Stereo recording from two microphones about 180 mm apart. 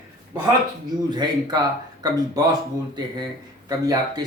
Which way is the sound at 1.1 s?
25° right (ahead or behind).